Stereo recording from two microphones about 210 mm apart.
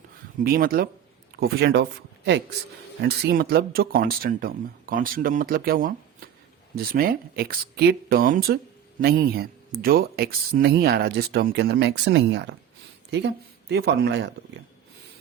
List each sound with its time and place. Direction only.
0.3 s speech: 45° right (ahead or behind)